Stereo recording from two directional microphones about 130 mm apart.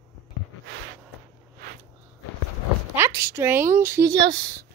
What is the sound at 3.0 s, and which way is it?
A woman's voice, 20° right (ahead or behind).